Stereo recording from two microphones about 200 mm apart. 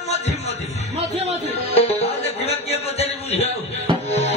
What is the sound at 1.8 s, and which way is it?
Music, 30° left (ahead or behind).